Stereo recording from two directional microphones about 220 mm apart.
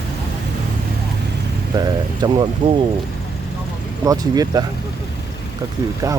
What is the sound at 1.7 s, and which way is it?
Speech, 20° right (ahead or behind).